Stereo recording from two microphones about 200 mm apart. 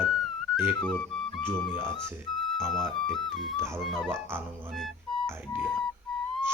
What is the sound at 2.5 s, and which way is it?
Speech, centre (ahead or behind).